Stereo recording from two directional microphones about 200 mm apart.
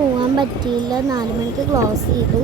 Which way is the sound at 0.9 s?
20° right (ahead or behind).